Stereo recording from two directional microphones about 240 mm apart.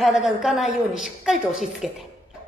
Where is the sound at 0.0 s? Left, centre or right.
Centre.